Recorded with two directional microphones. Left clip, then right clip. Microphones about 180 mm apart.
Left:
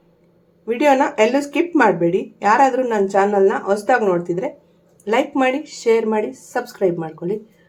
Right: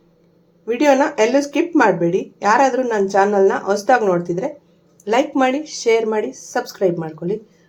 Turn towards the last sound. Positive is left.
turn(degrees=-5)  # may be behind; listen again after turning